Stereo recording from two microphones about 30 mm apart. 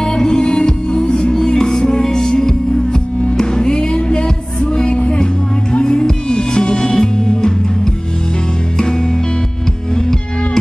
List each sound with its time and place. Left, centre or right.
0.0 s music: left